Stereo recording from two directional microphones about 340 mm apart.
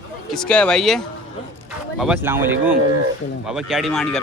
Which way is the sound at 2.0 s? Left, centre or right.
Centre.